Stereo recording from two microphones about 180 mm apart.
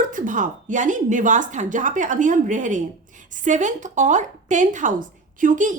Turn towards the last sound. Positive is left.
turn(degrees=-45)  # may be behind; listen again after turning